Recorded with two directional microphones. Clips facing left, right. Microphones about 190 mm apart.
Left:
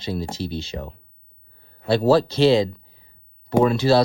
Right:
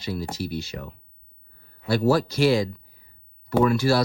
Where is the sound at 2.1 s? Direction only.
25° left (ahead or behind).